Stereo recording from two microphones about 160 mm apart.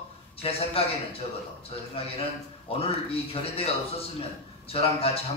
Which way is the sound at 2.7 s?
40° left (ahead or behind).